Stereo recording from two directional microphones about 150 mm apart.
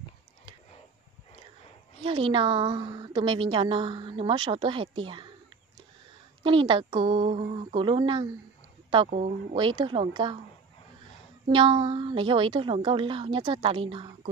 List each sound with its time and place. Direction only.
2.0 s a woman's voice: 35° right (ahead or behind)
6.4 s a woman's voice: 35° right (ahead or behind)
9.1 s speech: 55° right (ahead or behind)
9.6 s a woman's voice: 35° right (ahead or behind)
11.4 s a woman's voice: 35° right (ahead or behind)